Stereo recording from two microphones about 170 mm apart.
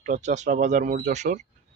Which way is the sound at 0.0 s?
45° right (ahead or behind).